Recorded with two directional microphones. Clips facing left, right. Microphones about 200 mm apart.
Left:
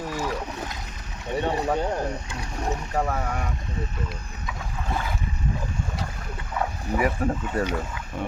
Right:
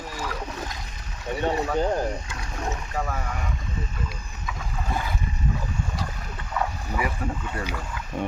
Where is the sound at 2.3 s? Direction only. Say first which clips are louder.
Left 2 dB; 35° left (ahead or behind).